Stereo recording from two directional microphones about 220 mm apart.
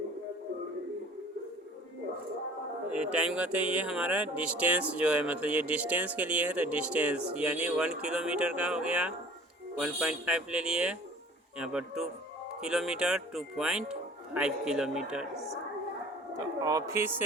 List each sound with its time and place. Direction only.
2.9 s speech: 5° right (ahead or behind)
16.3 s speech: 15° right (ahead or behind)